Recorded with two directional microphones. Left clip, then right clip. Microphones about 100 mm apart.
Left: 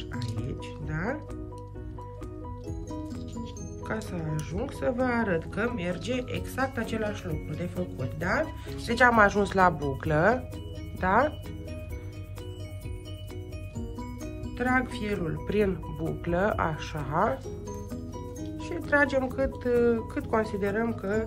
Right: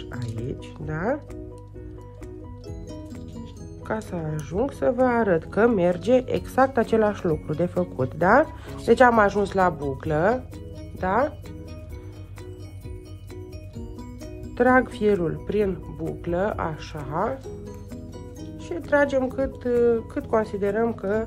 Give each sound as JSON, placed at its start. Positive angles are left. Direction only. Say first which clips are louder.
{"t": 0.1, "sound": "music", "louder": "right 6 dB", "side_deg": -10}
{"t": 3.8, "sound": "speech", "louder": "right 5 dB", "side_deg": -20}
{"t": 8.7, "sound": "speech", "louder": "right 5 dB", "side_deg": -25}
{"t": 14.6, "sound": "speech", "louder": "right 9 dB", "side_deg": -30}
{"t": 15.2, "sound": "speech", "louder": "right 3 dB", "side_deg": -15}
{"t": 18.6, "sound": "speech", "louder": "right 3 dB", "side_deg": -20}